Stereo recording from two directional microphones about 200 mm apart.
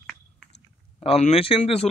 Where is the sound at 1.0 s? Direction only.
30° left (ahead or behind).